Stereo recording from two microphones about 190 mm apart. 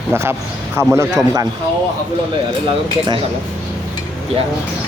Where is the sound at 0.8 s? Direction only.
15° right (ahead or behind).